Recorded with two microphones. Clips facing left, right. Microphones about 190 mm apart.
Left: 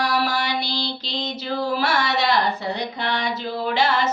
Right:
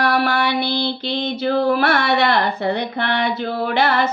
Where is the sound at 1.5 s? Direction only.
60° right (ahead or behind).